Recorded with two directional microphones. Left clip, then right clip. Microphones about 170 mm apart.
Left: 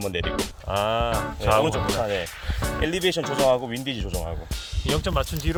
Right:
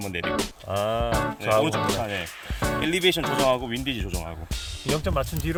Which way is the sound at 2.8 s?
25° left (ahead or behind).